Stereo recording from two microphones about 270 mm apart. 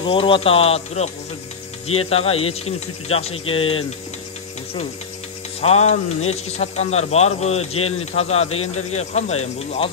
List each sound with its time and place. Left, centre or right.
0.0 s a man's voice: centre
5.6 s a man's voice: left